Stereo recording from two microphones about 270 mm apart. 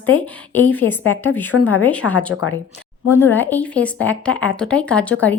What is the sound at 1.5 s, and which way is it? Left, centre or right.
Speech, left.